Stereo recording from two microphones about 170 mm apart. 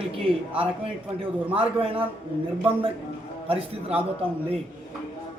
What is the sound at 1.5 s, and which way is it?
Speech, 30° right (ahead or behind).